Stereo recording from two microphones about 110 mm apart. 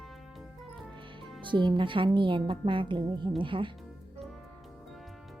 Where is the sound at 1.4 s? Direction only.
45° right (ahead or behind).